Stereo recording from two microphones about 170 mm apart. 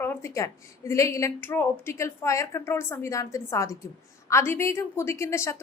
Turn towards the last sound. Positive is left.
turn(degrees=15)  # may be behind; listen again after turning